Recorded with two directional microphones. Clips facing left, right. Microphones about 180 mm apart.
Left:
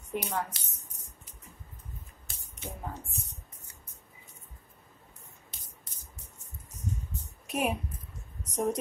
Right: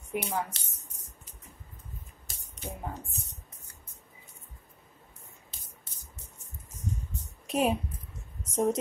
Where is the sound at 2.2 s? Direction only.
35° right (ahead or behind).